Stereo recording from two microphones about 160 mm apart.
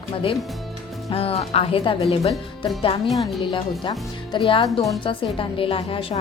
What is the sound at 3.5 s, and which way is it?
Speech, 30° left (ahead or behind).